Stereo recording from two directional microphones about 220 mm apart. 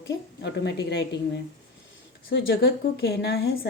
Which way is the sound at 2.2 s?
45° left (ahead or behind).